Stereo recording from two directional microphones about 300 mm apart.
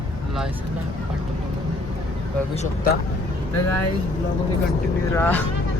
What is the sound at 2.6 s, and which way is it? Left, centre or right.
Speech, left.